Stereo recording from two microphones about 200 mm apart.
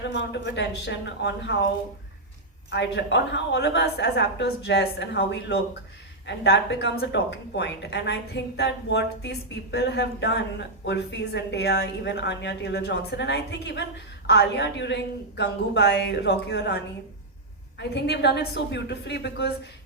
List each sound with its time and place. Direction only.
0.0 s a woman's voice: 60° left (ahead or behind)
2.6 s a woman's voice: 60° left (ahead or behind)